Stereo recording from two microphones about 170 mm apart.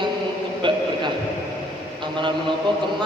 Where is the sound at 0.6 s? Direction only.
30° right (ahead or behind).